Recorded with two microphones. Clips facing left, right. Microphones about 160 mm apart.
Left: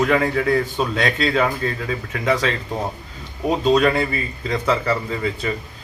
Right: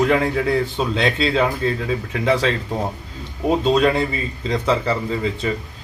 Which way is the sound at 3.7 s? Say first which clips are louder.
Even; 15° right (ahead or behind).